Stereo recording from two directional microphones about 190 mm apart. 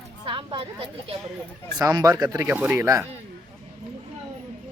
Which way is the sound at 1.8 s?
15° right (ahead or behind).